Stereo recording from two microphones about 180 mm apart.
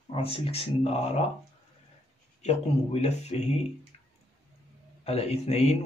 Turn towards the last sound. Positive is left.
turn(degrees=35)  # may be behind; listen again after turning